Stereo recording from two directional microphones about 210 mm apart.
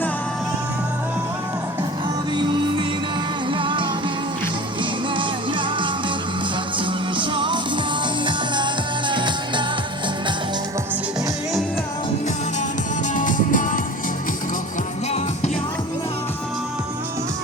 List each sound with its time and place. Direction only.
2.3 s music: 20° right (ahead or behind)
5.1 s music: 25° right (ahead or behind)
13.1 s music: 40° left (ahead or behind)